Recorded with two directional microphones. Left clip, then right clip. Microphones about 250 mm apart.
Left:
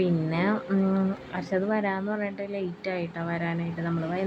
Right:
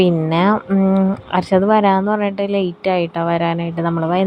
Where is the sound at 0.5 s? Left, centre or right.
Centre.